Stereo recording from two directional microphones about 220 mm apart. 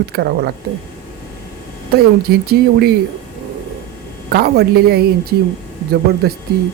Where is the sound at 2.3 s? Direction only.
45° right (ahead or behind).